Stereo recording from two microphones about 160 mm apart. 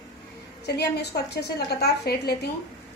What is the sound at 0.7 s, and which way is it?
A woman's voice, 90° left.